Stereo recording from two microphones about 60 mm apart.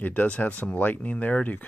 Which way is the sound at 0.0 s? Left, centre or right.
Left.